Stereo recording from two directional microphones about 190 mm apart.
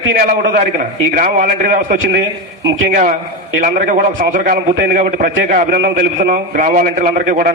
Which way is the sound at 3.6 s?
40° right (ahead or behind).